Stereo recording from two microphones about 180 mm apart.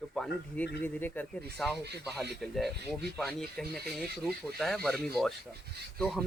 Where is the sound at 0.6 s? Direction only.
10° left (ahead or behind).